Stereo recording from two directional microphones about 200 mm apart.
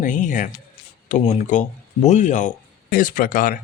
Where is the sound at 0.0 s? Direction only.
40° left (ahead or behind).